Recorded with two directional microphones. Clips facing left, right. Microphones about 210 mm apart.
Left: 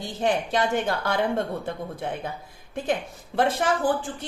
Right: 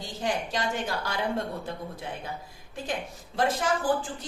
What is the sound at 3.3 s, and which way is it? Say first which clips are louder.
Speech: left 4 dB; 60° left (ahead or behind).